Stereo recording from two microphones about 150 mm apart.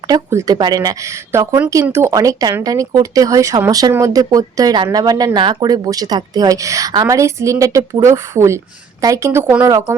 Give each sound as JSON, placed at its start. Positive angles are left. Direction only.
{"t": 0.1, "sound": "speech", "side_deg": -20}